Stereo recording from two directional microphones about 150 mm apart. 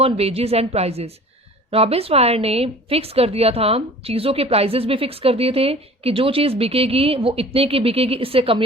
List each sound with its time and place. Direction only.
0.0 s a woman's voice: 40° right (ahead or behind)